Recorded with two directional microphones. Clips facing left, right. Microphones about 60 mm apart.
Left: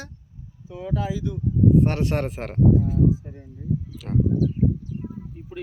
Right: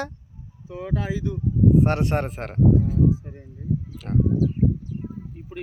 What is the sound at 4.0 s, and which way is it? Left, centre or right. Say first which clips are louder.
Speech: even; right.